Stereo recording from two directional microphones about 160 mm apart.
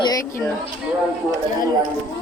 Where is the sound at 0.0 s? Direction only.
20° left (ahead or behind).